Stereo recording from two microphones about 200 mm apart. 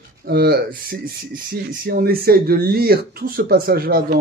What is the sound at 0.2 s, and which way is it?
Speech, 50° right (ahead or behind).